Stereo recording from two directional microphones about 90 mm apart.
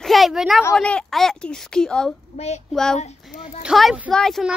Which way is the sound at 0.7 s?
10° left (ahead or behind).